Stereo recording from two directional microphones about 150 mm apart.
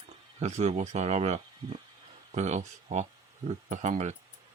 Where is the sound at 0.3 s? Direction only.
50° right (ahead or behind).